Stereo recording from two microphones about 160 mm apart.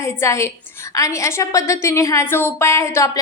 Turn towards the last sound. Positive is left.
turn(degrees=20)  # may be behind; listen again after turning